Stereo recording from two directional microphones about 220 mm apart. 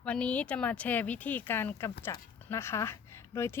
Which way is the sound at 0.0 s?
5° left (ahead or behind).